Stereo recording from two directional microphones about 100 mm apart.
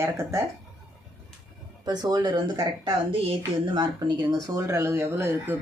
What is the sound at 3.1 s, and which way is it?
Speech, 60° right (ahead or behind).